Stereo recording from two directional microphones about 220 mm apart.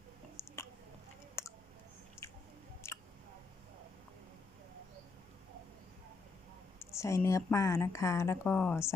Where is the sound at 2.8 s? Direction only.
10° left (ahead or behind).